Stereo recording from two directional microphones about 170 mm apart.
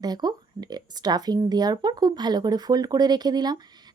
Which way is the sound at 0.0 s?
25° right (ahead or behind).